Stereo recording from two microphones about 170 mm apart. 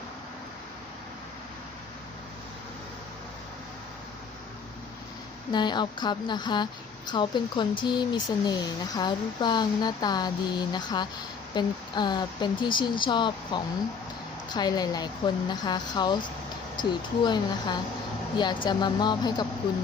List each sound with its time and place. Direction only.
5.5 s speech: 25° left (ahead or behind)